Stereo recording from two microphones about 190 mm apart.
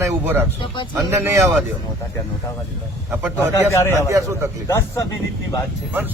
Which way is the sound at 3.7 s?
15° left (ahead or behind).